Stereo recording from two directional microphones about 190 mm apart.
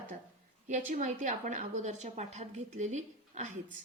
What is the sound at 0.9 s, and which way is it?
A woman's voice, 40° right (ahead or behind).